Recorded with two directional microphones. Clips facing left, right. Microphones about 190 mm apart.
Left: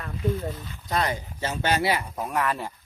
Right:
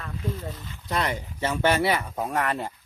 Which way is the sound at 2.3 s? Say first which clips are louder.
Left 1 dB; 25° right (ahead or behind).